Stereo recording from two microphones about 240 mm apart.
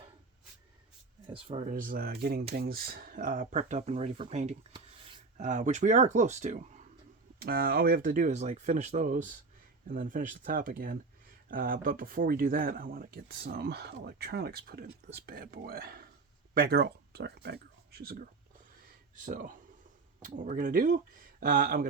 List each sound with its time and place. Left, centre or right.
1.3 s speech: right